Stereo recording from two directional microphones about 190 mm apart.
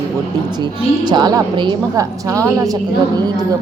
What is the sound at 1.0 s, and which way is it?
A woman's voice, 20° right (ahead or behind).